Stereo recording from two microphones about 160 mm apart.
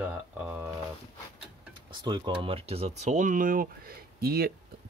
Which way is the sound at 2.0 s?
30° right (ahead or behind).